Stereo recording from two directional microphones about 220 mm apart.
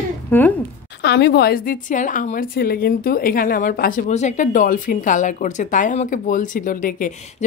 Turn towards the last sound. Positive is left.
turn(degrees=35)  # may be behind; listen again after turning